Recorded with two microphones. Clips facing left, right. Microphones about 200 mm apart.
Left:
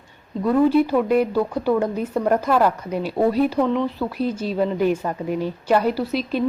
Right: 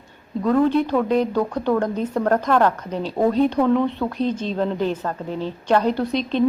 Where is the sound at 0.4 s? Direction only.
5° left (ahead or behind).